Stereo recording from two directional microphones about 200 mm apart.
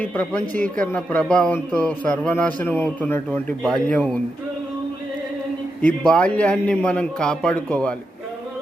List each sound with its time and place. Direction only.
0.0 s a man's voice: 10° left (ahead or behind)
5.8 s a man's voice: 5° left (ahead or behind)